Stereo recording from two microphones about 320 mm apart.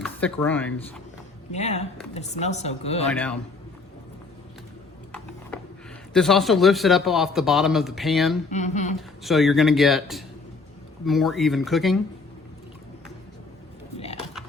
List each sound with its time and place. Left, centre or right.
0.0 s speech: centre
1.5 s speech: centre
3.1 s a man's voice: centre
6.1 s a man's voice: centre
8.4 s speech: left
9.0 s a man's voice: centre
14.0 s a sound: centre